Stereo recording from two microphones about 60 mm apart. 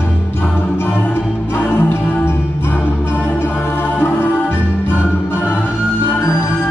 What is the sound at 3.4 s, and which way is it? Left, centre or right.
Music, left.